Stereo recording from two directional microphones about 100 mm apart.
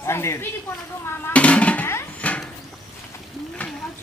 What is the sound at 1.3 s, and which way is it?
Music, 15° left (ahead or behind).